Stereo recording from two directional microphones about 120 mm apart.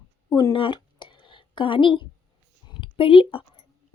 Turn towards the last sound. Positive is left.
turn(degrees=45)  # may be behind; listen again after turning